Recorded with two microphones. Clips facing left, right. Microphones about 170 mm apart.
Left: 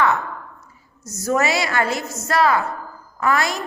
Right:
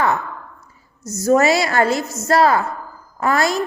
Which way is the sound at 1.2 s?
35° right (ahead or behind).